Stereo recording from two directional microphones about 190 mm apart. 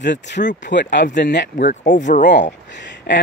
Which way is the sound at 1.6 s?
40° left (ahead or behind).